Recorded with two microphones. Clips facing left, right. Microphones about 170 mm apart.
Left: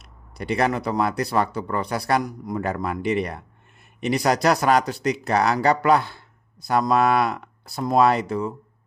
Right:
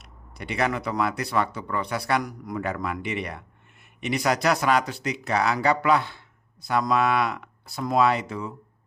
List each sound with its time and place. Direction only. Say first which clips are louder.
0.0 s speech: left 5 dB; 35° left (ahead or behind)